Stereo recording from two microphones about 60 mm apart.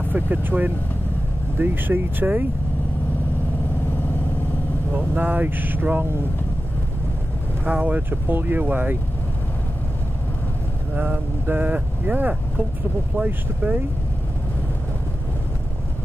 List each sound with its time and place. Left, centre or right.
0.1 s speech: right
4.9 s speech: right
7.6 s speech: right
11.0 s speech: right
13.6 s speech: right